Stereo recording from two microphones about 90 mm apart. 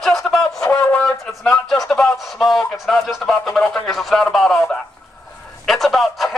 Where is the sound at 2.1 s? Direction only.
Centre (ahead or behind).